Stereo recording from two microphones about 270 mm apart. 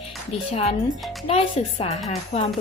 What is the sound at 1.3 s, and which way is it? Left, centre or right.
Speech, left.